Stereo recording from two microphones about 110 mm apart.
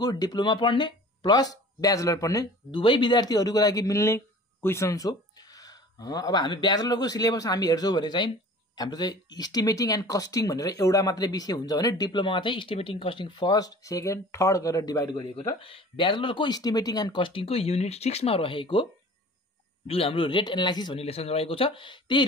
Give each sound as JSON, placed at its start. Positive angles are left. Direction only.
{"t": 0.0, "sound": "speech", "side_deg": 35}
{"t": 2.7, "sound": "speech", "side_deg": 45}
{"t": 15.6, "sound": "speech", "side_deg": 55}
{"t": 16.5, "sound": "speech", "side_deg": 35}
{"t": 19.9, "sound": "speech", "side_deg": 60}
{"t": 21.0, "sound": "speech", "side_deg": 65}